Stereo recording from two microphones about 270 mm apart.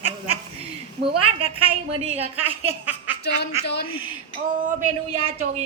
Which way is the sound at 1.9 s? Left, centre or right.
Right.